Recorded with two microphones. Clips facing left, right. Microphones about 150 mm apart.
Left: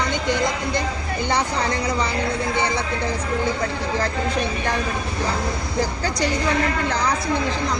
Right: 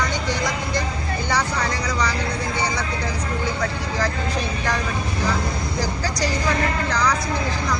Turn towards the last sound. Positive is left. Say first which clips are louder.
# right 1 dB
turn(degrees=55)  # may be behind; listen again after turning